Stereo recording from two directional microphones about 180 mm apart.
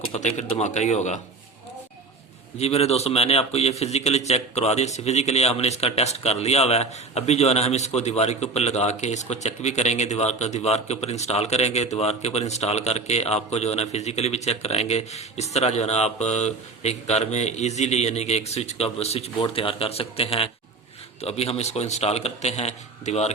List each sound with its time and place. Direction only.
0.1 s a man's voice: 40° left (ahead or behind)
2.6 s a man's voice: 35° left (ahead or behind)